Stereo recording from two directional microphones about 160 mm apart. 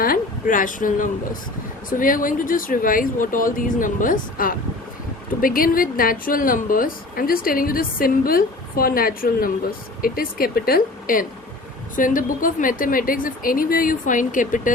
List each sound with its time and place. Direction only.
0.0 s a woman's voice: 60° left (ahead or behind)